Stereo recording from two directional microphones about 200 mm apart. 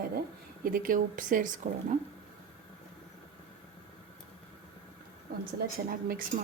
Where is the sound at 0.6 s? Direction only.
45° right (ahead or behind).